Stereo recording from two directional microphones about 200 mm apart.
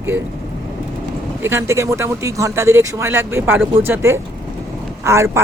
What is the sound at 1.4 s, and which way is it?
Speech, 15° right (ahead or behind).